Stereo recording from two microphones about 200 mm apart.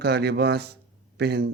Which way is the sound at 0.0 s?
55° right (ahead or behind).